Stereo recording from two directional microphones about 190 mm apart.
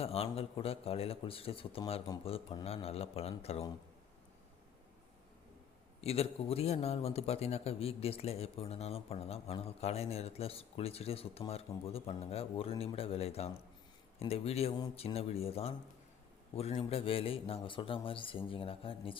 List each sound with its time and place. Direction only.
0.0 s a man's voice: 30° left (ahead or behind)
6.0 s a man's voice: 30° left (ahead or behind)